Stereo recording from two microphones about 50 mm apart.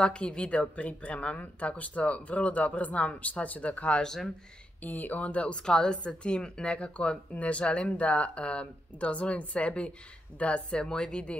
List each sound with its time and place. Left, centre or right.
0.0 s speech: centre
4.0 s speech: centre
4.8 s speech: left
5.7 s speech: centre